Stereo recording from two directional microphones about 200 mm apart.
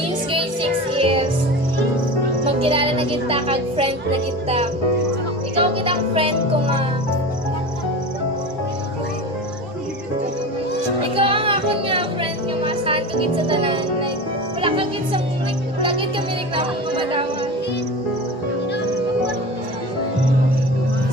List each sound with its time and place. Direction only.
0.9 s music: 25° right (ahead or behind)
2.6 s music: 30° right (ahead or behind)
4.4 s speech: 30° right (ahead or behind)
5.5 s music: 25° right (ahead or behind)
11.1 s music: 25° right (ahead or behind)